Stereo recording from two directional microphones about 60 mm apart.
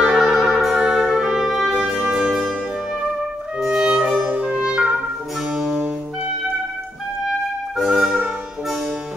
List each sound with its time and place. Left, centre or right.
0.1 s music: centre
3.5 s music: centre
7.7 s music: centre